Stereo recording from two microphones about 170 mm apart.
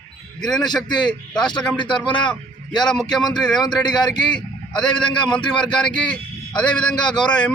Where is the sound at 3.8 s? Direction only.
25° left (ahead or behind).